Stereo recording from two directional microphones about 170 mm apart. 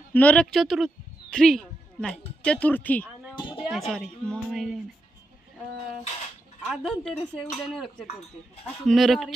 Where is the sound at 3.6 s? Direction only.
Centre (ahead or behind).